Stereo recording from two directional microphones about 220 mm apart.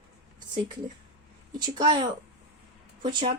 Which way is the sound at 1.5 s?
20° right (ahead or behind).